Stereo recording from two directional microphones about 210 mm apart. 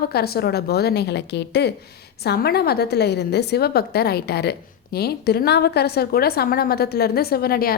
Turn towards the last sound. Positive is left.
turn(degrees=45)  # may be behind; listen again after turning